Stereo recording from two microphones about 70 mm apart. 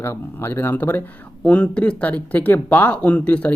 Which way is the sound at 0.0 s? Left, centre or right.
Left.